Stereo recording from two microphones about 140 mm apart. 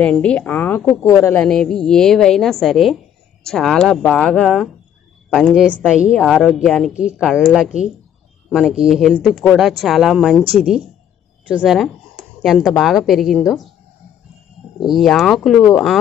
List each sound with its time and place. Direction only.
0.0 s a woman's voice: 5° left (ahead or behind)
1.4 s speech: 5° left (ahead or behind)
11.4 s speech: 5° right (ahead or behind)
14.8 s speech: centre (ahead or behind)